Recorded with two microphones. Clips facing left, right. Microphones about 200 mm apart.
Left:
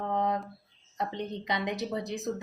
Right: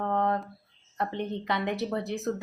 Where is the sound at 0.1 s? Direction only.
15° left (ahead or behind).